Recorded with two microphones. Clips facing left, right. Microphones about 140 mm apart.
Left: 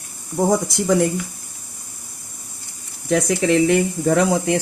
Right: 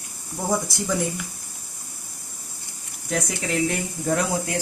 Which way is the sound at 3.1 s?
70° left (ahead or behind).